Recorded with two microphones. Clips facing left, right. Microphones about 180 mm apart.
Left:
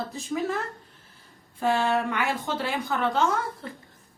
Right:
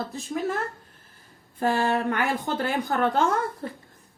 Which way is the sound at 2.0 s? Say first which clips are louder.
Right 2 dB; 50° right (ahead or behind).